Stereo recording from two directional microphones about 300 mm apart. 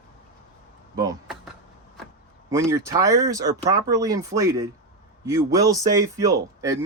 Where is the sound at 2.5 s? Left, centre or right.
Centre.